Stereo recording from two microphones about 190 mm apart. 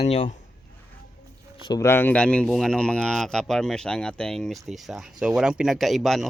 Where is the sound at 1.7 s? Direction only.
15° left (ahead or behind).